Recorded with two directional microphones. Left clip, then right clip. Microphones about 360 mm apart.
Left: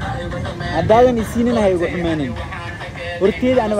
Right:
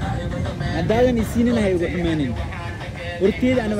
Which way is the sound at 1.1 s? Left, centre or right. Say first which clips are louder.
Left 3 dB; left.